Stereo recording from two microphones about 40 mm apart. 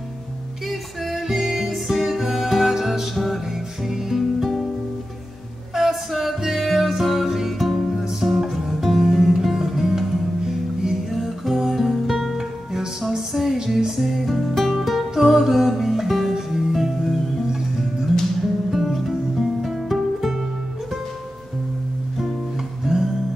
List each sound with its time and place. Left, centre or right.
0.7 s music: centre
5.8 s music: centre
18.7 s music: centre
22.9 s music: centre